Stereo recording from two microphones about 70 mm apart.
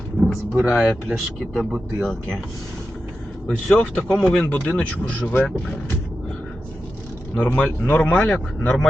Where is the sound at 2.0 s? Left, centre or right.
Centre.